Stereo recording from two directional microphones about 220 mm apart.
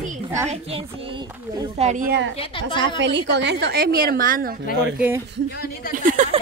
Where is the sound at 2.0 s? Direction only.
50° right (ahead or behind).